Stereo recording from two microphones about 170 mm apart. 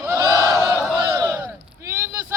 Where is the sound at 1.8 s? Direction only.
20° right (ahead or behind).